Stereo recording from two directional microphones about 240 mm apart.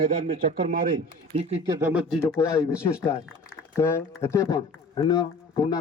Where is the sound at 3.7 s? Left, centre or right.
Centre.